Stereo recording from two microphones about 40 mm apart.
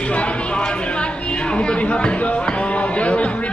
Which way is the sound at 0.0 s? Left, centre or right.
Left.